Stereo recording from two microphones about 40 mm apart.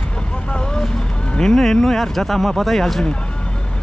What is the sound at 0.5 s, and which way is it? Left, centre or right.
Speech, centre.